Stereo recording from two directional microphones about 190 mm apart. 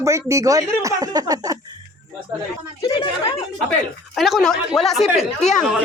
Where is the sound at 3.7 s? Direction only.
Centre (ahead or behind).